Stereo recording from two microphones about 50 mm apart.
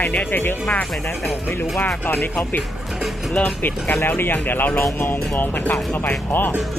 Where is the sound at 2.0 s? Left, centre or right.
Left.